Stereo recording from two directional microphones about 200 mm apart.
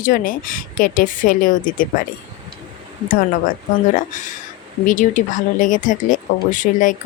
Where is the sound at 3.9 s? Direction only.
40° left (ahead or behind).